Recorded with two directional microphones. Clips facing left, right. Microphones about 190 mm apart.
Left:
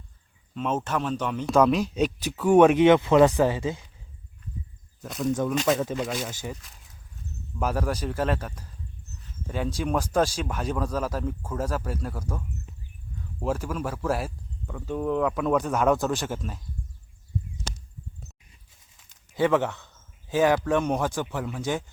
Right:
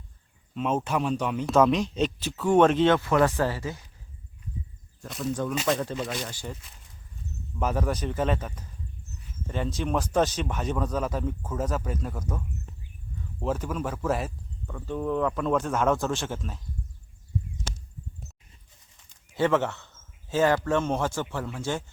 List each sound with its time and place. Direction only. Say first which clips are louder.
0.5 s speech: right 1 dB; 5° right (ahead or behind); by 3.8 s 20° left (ahead or behind)
5.0 s speech: left 4 dB; centre (ahead or behind)
5.3 s speech: left 3 dB; 15° left (ahead or behind)
5.5 s speech: left 3 dB; centre (ahead or behind)
13.4 s speech: left 1 dB; 10° left (ahead or behind)
18.9 s a sound: left 1 dB; 5° left (ahead or behind)
19.5 s speech: left 1 dB; 15° left (ahead or behind)